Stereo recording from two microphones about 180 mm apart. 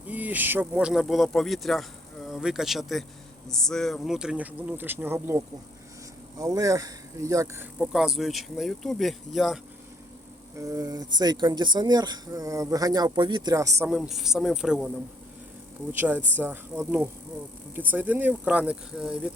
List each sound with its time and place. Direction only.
0.1 s speech: 10° right (ahead or behind)
6.4 s speech: 20° right (ahead or behind)
7.8 s speech: centre (ahead or behind)
10.6 s speech: 20° right (ahead or behind)
13.9 s speech: 5° right (ahead or behind)
15.9 s speech: 10° right (ahead or behind)